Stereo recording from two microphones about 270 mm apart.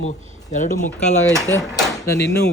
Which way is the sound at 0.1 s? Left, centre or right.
Left.